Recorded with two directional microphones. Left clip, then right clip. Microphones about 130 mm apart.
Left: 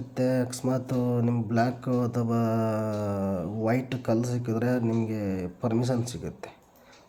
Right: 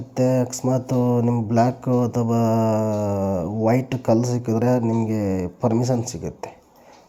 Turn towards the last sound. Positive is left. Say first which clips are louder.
# right 7 dB
turn(degrees=-25)  # may be behind; listen again after turning